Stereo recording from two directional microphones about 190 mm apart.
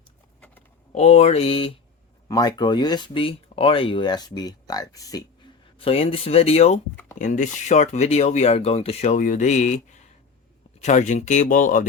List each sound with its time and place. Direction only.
0.9 s speech: 35° left (ahead or behind); by 5.3 s 20° left (ahead or behind)
5.8 s speech: 30° left (ahead or behind)